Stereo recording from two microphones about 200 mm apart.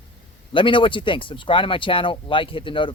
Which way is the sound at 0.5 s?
25° left (ahead or behind).